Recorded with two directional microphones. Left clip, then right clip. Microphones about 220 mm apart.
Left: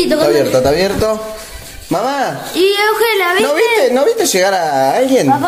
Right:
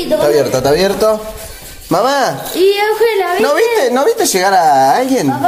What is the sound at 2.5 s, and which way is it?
Speech, 35° left (ahead or behind).